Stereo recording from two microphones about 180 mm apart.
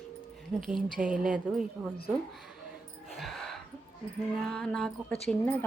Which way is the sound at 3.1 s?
Centre (ahead or behind).